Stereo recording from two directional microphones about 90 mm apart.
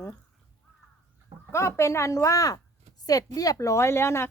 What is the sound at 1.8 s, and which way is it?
Speech, 35° left (ahead or behind).